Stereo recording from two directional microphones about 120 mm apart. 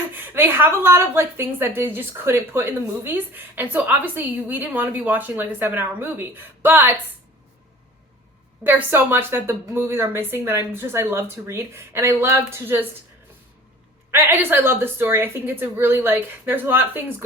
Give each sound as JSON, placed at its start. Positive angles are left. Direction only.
{"t": 0.3, "sound": "a woman's voice", "side_deg": -20}
{"t": 8.6, "sound": "speech", "side_deg": -15}
{"t": 14.1, "sound": "a woman's voice", "side_deg": -20}